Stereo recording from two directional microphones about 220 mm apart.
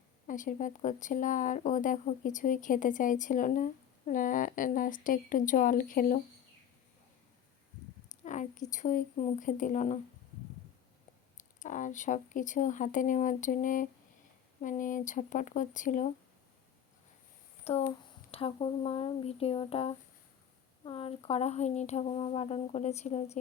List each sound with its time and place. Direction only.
0.3 s speech: 35° left (ahead or behind)
8.2 s a woman's voice: 35° left (ahead or behind)
11.3 s speech: 35° left (ahead or behind)
17.6 s speech: 25° left (ahead or behind)